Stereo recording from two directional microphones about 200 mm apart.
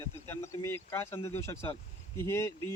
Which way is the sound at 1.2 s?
30° left (ahead or behind).